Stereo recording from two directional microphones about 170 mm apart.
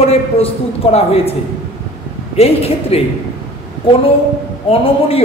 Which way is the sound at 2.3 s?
35° left (ahead or behind).